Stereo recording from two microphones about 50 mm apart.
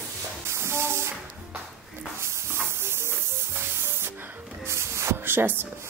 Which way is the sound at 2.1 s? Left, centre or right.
Right.